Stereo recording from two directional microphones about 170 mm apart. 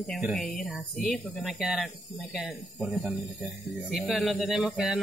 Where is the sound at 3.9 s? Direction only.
Centre (ahead or behind).